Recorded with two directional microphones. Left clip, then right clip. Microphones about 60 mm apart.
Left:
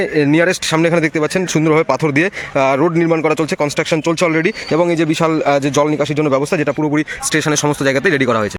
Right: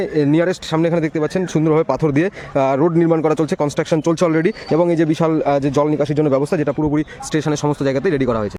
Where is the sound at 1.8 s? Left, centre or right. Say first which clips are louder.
Left 3 dB; right.